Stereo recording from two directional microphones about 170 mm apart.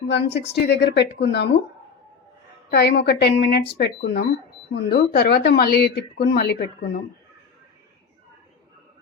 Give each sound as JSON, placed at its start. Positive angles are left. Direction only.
{"t": 0.1, "sound": "speech", "side_deg": 85}
{"t": 2.6, "sound": "speech", "side_deg": 75}